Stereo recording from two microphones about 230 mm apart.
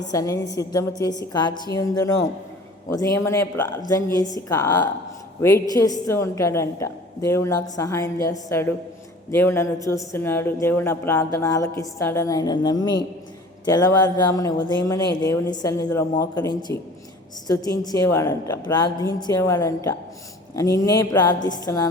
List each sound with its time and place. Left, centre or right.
0.0 s speech: centre
17.8 s speech: centre